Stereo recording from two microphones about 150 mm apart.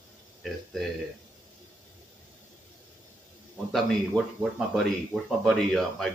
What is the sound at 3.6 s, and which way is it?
Speech, centre (ahead or behind).